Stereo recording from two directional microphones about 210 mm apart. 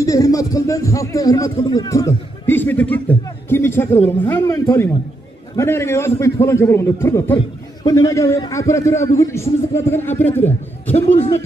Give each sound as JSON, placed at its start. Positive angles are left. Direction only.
{"t": 0.0, "sound": "a man's voice", "side_deg": 15}
{"t": 10.9, "sound": "a man's voice", "side_deg": 30}